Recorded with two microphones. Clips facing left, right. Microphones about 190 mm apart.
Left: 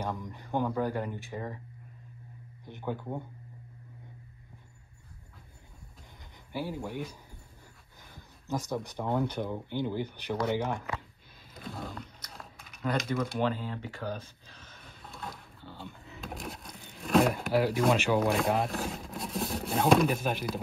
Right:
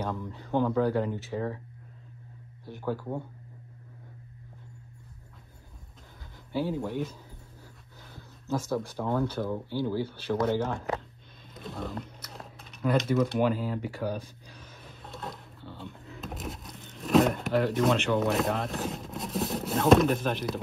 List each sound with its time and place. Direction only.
0.0 s a sound: 15° left (ahead or behind)
0.7 s speech: 10° left (ahead or behind)
2.6 s speech: 20° left (ahead or behind)
6.5 s speech: 10° left (ahead or behind)
8.1 s speech: 15° left (ahead or behind)
11.5 s roaring cats: centre (ahead or behind)
13.4 s speech: 10° right (ahead or behind)
15.1 s a sound: centre (ahead or behind)
16.8 s speech: centre (ahead or behind)